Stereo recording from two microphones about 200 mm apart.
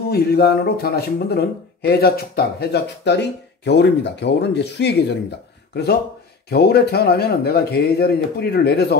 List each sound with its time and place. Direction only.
0.1 s speech: 50° left (ahead or behind)
6.5 s speech: 55° left (ahead or behind)